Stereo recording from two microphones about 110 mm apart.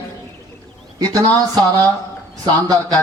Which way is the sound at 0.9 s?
35° right (ahead or behind).